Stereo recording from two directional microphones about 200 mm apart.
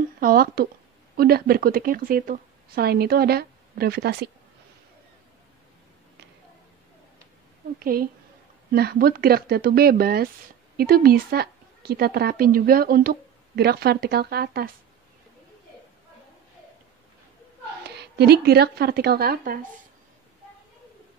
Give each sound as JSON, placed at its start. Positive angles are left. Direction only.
{"t": 0.2, "sound": "a woman's voice", "side_deg": -45}
{"t": 7.8, "sound": "a woman's voice", "side_deg": -45}
{"t": 17.8, "sound": "a woman's voice", "side_deg": -55}